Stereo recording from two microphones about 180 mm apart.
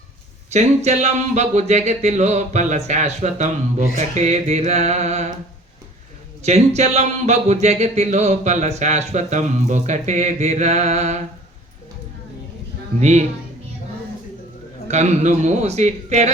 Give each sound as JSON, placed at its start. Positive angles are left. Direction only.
{"t": 0.5, "sound": "speech", "side_deg": -40}
{"t": 6.4, "sound": "speech", "side_deg": -35}
{"t": 13.0, "sound": "speech", "side_deg": -40}
{"t": 14.8, "sound": "speech", "side_deg": -40}